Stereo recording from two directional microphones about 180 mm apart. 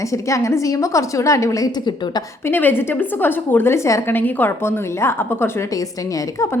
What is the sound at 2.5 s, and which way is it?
A woman's voice, 10° left (ahead or behind).